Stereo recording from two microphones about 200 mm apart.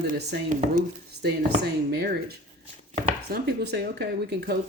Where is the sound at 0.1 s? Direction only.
45° right (ahead or behind).